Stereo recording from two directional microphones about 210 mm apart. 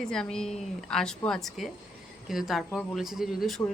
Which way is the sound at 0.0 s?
5° left (ahead or behind).